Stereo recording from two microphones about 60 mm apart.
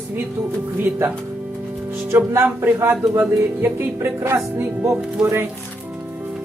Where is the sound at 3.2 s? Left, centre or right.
Right.